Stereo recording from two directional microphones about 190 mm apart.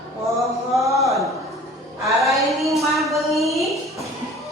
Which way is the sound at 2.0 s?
Centre (ahead or behind).